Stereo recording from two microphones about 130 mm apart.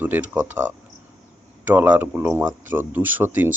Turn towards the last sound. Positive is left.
turn(degrees=-15)  # may be behind; listen again after turning